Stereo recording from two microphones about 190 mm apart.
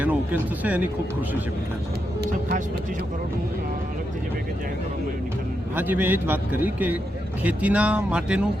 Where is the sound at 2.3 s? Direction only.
45° right (ahead or behind).